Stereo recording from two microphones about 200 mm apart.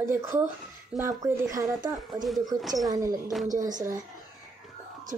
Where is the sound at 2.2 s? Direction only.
Centre (ahead or behind).